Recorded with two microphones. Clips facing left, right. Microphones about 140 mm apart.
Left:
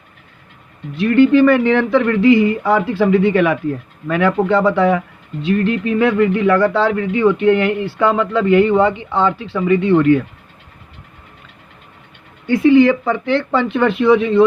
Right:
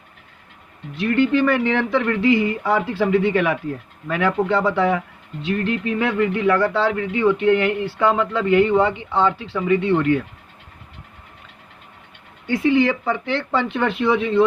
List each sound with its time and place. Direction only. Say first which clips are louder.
0.9 s speech: left 7 dB; 65° left (ahead or behind); by 10.2 s 85° left
12.5 s speech: left 7 dB; 60° left (ahead or behind); by 14.4 s 85° left